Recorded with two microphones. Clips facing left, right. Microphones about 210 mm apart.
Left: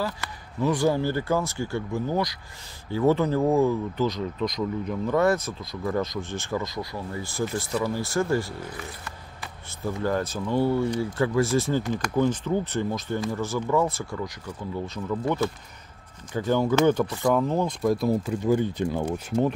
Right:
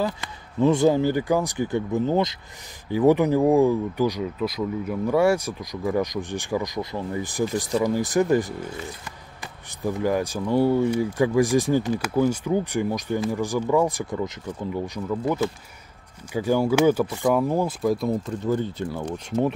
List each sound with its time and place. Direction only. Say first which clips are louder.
0.0 s speech: right 4 dB; 20° right (ahead or behind)
15.0 s speech: right 1 dB; 5° right (ahead or behind); by 19.4 s 10° left (ahead or behind)